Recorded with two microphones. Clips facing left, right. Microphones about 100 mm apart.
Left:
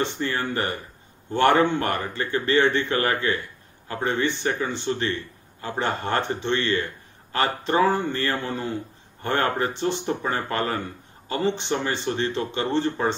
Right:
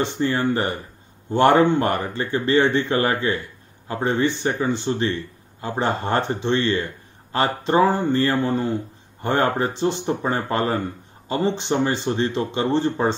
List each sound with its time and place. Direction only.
0.2 s a man's voice: 25° right (ahead or behind)